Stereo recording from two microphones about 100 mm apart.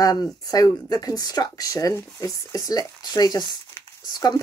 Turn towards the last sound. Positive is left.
turn(degrees=40)  # may be behind; listen again after turning